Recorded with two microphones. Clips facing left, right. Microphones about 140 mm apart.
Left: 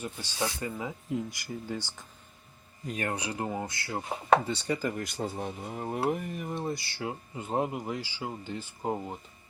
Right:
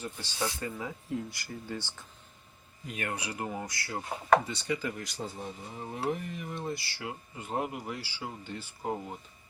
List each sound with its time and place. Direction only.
0.0 s speech: 15° left (ahead or behind)
2.8 s speech: 35° left (ahead or behind)
7.0 s speech: 25° left (ahead or behind)